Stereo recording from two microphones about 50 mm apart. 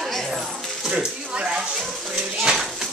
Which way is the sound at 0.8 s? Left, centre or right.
Centre.